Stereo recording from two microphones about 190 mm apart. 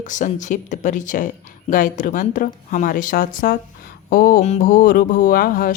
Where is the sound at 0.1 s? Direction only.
40° left (ahead or behind).